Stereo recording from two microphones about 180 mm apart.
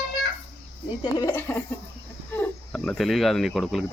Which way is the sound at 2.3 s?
10° left (ahead or behind).